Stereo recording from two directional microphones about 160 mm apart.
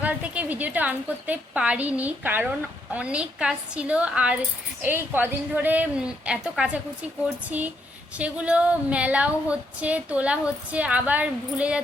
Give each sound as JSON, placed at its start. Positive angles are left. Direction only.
{"t": 0.0, "sound": "a woman's voice", "side_deg": -10}
{"t": 8.2, "sound": "a woman's voice", "side_deg": -10}